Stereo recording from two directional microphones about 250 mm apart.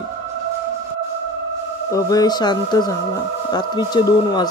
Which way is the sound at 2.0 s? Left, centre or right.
Centre.